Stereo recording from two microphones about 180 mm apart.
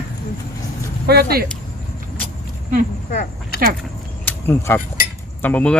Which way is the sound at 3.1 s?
45° left (ahead or behind).